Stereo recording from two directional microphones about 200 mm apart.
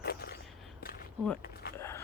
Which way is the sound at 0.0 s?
50° left (ahead or behind).